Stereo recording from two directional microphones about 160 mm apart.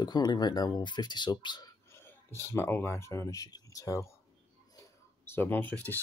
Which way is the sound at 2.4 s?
15° left (ahead or behind).